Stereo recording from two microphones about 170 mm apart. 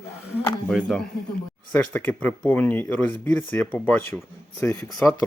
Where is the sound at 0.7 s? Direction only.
Centre (ahead or behind); by 4.9 s 15° left (ahead or behind).